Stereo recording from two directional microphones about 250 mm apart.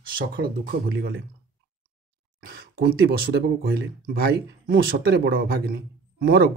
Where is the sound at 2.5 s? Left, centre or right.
Right.